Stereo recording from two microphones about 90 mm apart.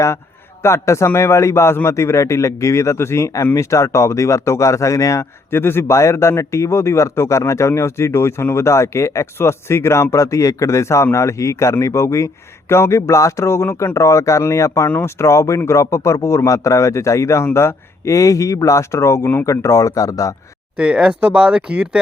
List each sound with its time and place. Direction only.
0.6 s a man's voice: 30° left (ahead or behind)
5.5 s a man's voice: 25° left (ahead or behind)
20.7 s speech: 10° right (ahead or behind)